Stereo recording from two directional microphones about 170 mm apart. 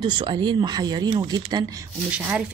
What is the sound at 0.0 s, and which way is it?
Speech, 25° right (ahead or behind).